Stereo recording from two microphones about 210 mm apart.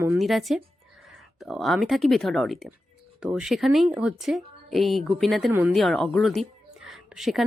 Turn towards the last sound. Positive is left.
turn(degrees=0)  # may be behind; listen again after turning